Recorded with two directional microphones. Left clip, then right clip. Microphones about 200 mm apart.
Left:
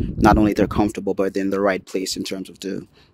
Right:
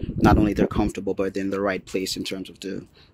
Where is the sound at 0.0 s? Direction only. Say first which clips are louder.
Left 4 dB; 50° left (ahead or behind).